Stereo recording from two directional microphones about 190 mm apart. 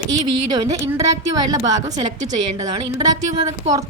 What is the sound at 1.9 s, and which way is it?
A woman's voice, 20° right (ahead or behind).